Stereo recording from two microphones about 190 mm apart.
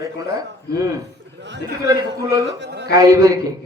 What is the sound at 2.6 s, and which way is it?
Speech, 65° right (ahead or behind).